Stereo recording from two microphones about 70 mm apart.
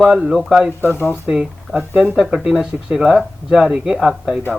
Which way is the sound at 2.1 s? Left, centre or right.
Centre.